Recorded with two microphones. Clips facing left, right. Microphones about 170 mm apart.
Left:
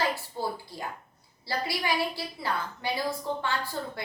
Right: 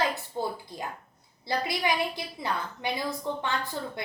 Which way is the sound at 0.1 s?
20° right (ahead or behind).